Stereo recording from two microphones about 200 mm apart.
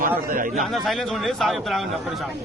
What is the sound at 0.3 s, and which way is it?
Speech, 45° right (ahead or behind).